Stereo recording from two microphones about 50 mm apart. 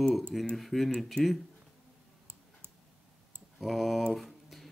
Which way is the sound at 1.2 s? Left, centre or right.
Right.